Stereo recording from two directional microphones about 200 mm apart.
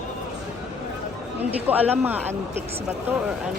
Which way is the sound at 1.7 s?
10° right (ahead or behind).